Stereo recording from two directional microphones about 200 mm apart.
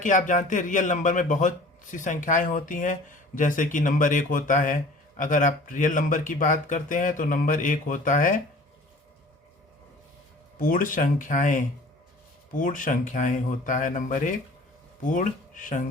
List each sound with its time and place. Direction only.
0.0 s speech: 40° left (ahead or behind)
10.6 s speech: 45° left (ahead or behind)